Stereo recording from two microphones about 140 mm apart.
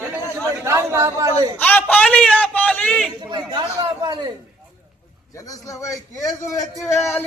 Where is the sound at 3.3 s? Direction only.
30° right (ahead or behind).